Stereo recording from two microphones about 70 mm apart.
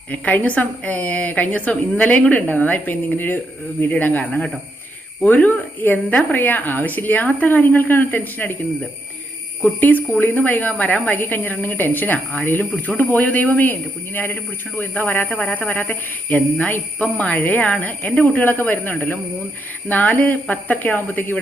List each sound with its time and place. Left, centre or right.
0.1 s a woman's voice: left
9.6 s a woman's voice: left